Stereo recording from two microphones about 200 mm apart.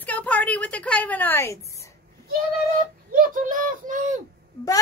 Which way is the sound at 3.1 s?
45° right (ahead or behind).